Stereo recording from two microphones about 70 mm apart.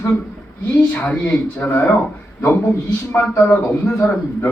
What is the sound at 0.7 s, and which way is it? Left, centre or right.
Speech, centre.